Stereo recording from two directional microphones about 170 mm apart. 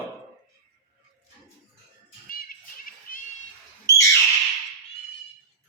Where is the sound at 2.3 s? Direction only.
55° left (ahead or behind).